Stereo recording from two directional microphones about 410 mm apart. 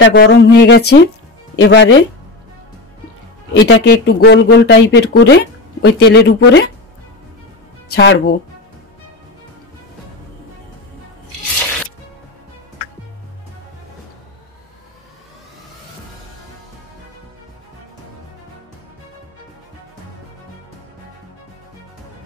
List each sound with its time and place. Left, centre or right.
0.0 s speech: left
3.5 s speech: left
7.9 s speech: left